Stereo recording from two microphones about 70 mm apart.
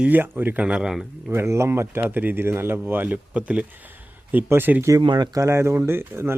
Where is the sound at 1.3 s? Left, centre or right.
Right.